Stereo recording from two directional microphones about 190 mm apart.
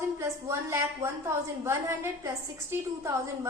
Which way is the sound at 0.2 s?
15° right (ahead or behind).